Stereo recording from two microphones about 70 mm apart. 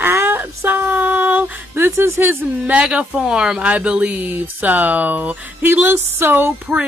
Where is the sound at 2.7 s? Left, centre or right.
Centre.